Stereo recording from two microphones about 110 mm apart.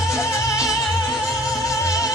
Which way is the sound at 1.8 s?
30° left (ahead or behind).